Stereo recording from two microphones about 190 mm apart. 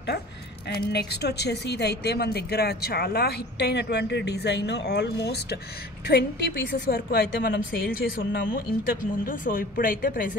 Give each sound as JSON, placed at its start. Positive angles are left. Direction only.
{"t": 0.7, "sound": "a woman's voice", "side_deg": 60}